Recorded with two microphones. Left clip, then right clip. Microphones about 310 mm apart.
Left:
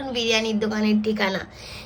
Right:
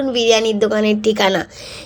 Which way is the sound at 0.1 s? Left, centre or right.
Centre.